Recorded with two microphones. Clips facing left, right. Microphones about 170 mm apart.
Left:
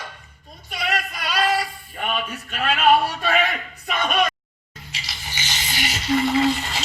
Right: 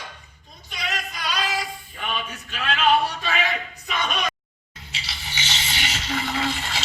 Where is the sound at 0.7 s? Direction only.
55° left (ahead or behind).